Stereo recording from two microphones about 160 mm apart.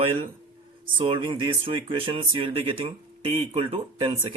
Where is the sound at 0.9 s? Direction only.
35° right (ahead or behind).